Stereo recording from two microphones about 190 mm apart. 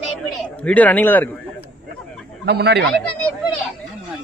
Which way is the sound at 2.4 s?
60° right (ahead or behind).